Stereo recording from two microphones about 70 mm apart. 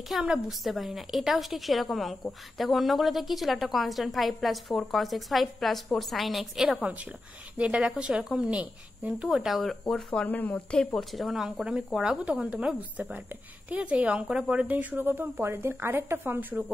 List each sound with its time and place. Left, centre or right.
0.1 s a woman's voice: centre
6.8 s speech: centre
9.3 s a woman's voice: centre
10.2 s speech: left
11.0 s a woman's voice: centre; by 16.6 s right